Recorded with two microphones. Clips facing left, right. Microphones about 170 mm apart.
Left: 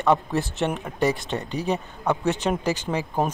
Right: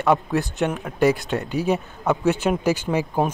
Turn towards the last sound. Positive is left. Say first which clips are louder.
# right 3 dB
turn(degrees=-10)  # may be behind; listen again after turning